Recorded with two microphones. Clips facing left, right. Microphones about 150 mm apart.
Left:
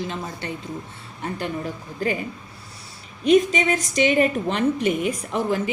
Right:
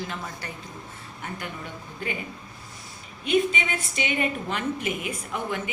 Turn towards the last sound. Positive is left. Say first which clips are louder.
# left 7 dB
turn(degrees=35)  # may be behind; listen again after turning